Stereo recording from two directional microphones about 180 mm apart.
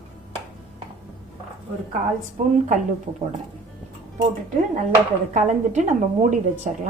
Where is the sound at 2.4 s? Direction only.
45° right (ahead or behind).